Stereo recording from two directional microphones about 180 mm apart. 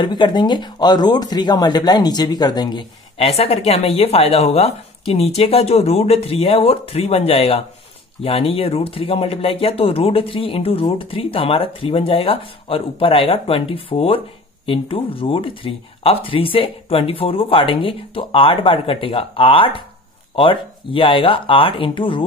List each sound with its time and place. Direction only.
0.0 s speech: 25° left (ahead or behind)